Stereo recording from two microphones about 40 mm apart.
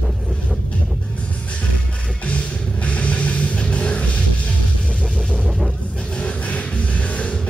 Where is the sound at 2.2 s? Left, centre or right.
Left.